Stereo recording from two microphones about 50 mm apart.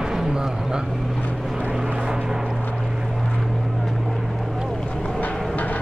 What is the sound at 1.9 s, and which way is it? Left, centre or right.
Vehicle, centre.